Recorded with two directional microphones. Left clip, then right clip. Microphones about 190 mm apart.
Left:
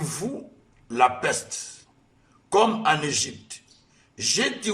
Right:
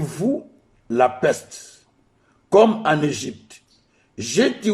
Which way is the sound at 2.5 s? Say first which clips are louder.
Right 5 dB; 40° right (ahead or behind).